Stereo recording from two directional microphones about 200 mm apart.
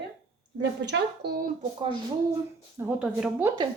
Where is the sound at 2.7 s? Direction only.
10° right (ahead or behind).